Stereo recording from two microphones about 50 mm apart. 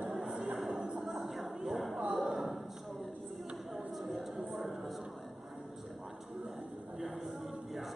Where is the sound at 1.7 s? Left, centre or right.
Centre.